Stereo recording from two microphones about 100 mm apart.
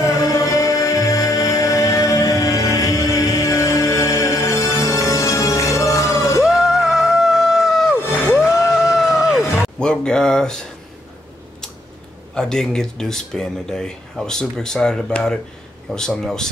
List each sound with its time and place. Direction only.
0.0 s music: 35° left (ahead or behind)
6.4 s a sound: 5° right (ahead or behind)
8.0 s music: 25° left (ahead or behind)
8.7 s groan: 5° right (ahead or behind)
9.8 s a sound: 10° left (ahead or behind)
12.4 s speech: 5° left (ahead or behind)